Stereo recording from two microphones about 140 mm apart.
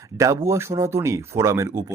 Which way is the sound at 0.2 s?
20° right (ahead or behind).